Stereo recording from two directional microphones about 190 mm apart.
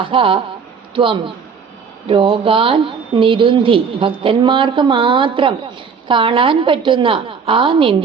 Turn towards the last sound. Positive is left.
turn(degrees=-25)  # may be behind; listen again after turning